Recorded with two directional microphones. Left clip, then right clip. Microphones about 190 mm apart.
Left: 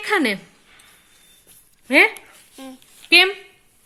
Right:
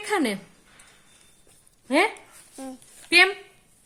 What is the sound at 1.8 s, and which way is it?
Speech, 15° left (ahead or behind).